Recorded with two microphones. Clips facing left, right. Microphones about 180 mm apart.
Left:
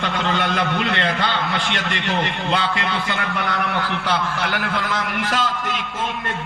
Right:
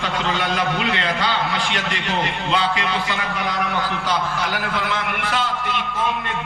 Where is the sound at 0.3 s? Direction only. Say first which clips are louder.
Left 1 dB; 55° left (ahead or behind).